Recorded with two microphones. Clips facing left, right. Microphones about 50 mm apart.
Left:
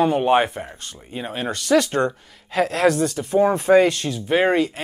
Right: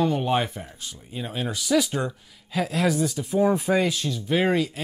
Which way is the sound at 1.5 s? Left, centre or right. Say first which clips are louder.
Left 5 dB; left.